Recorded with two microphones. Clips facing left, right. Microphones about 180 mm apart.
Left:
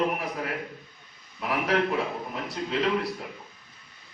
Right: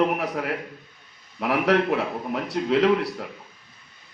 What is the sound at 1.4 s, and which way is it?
A man's voice, 70° right (ahead or behind).